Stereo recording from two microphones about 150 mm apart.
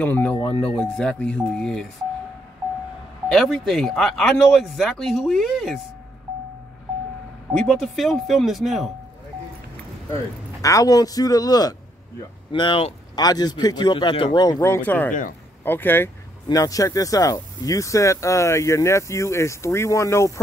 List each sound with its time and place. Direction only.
0.0 s speech: 10° left (ahead or behind)
3.3 s speech: centre (ahead or behind)
7.6 s speech: centre (ahead or behind)
10.6 s speech: 20° left (ahead or behind)
14.7 s speech: 10° left (ahead or behind)